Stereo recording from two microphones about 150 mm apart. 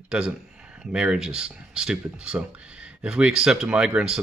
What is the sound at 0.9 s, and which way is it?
Speech, 5° right (ahead or behind).